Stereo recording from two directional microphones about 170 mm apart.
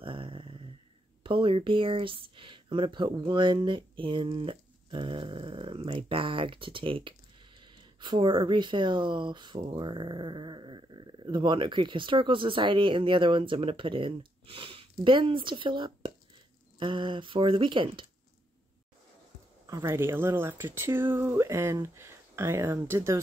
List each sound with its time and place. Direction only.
0.0 s a sound: 30° right (ahead or behind)
1.2 s speech: 30° right (ahead or behind)
19.6 s speech: 15° right (ahead or behind)